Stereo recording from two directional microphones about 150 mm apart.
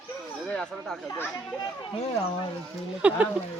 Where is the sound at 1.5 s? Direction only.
35° left (ahead or behind).